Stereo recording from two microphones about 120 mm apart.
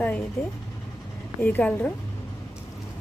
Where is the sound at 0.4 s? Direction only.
15° left (ahead or behind).